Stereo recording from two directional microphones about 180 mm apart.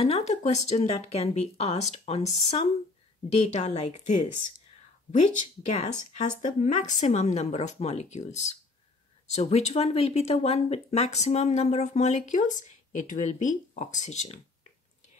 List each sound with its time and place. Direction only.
0.0 s speech: 35° left (ahead or behind)
5.7 s speech: 40° left (ahead or behind)